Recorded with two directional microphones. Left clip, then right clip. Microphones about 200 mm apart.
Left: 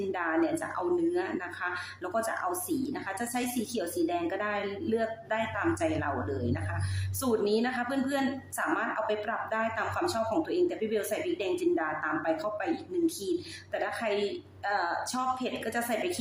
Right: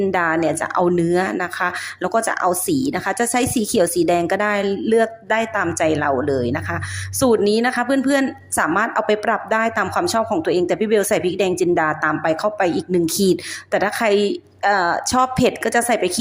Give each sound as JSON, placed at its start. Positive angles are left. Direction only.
{"t": 0.1, "sound": "a woman's voice", "side_deg": -45}